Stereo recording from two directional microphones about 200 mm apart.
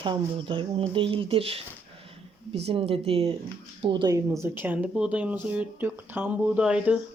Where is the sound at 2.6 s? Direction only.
30° right (ahead or behind); by 7.0 s 5° right (ahead or behind).